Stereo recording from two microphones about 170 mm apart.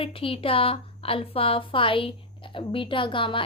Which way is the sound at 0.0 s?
30° left (ahead or behind).